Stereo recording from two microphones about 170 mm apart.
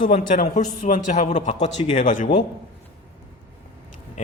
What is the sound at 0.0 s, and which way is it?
A man's voice, 50° left (ahead or behind).